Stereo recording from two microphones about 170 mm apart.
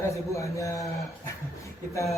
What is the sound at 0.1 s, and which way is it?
A man's voice, 20° left (ahead or behind).